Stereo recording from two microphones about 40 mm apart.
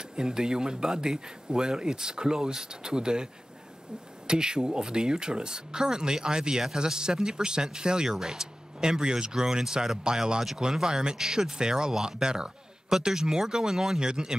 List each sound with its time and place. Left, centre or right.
0.1 s speech: centre
4.3 s speech: centre